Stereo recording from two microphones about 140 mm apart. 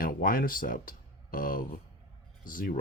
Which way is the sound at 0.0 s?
90° left.